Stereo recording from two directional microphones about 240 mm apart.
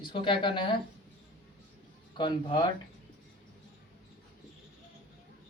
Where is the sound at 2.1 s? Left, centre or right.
Centre.